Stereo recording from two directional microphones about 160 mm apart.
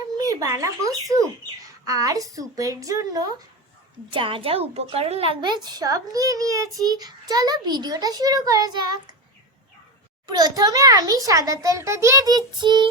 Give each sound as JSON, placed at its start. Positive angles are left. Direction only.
{"t": 0.2, "sound": "a child's voice", "side_deg": -20}
{"t": 4.1, "sound": "a woman's voice", "side_deg": -35}
{"t": 10.2, "sound": "a child's voice", "side_deg": -25}